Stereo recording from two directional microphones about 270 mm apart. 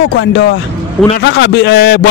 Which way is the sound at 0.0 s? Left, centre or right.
Left.